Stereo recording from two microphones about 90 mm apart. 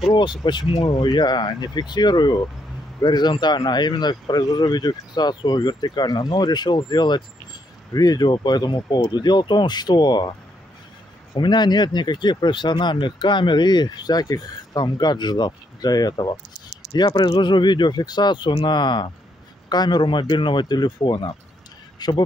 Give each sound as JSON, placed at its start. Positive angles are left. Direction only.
{"t": 0.1, "sound": "speech", "side_deg": 55}
{"t": 11.3, "sound": "speech", "side_deg": 55}
{"t": 21.9, "sound": "a sound", "side_deg": 50}